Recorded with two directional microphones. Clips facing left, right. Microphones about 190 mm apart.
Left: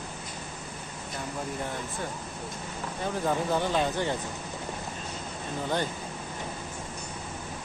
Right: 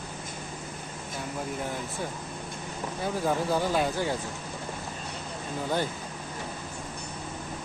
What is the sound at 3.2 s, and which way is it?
Speech, 10° right (ahead or behind).